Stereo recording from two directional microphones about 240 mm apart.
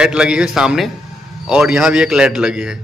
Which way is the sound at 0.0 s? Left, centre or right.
Centre.